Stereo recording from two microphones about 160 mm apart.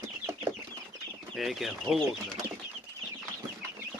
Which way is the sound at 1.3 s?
Centre (ahead or behind).